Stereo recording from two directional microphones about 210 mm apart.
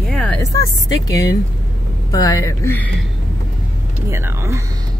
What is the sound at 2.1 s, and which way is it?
Speech, 15° left (ahead or behind).